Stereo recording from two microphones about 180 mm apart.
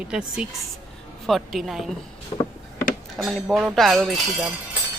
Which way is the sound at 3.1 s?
Centre (ahead or behind).